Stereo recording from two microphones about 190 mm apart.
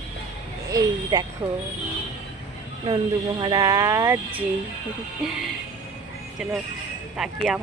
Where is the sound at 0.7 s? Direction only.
20° right (ahead or behind).